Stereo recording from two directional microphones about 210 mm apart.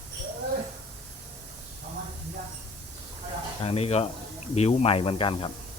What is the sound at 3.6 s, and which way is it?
Speech, 30° left (ahead or behind).